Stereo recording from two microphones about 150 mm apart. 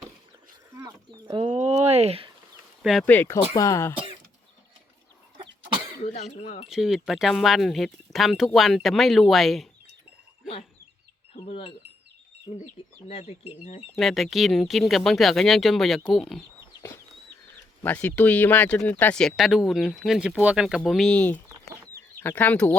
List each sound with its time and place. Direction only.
0.7 s a sound: 25° right (ahead or behind); by 2.3 s 40° right (ahead or behind)
2.8 s speech: centre (ahead or behind)
3.1 s speech: 15° left (ahead or behind)
6.0 s speech: 45° left (ahead or behind)
6.7 s speech: 5° right (ahead or behind)
11.3 s speech: 40° left (ahead or behind)
13.1 s speech: 40° left (ahead or behind)
13.9 s speech: centre (ahead or behind)
17.8 s speech: 10° left (ahead or behind)